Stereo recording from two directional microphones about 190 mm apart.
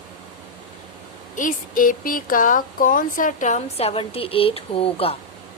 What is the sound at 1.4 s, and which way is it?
Speech, 45° left (ahead or behind).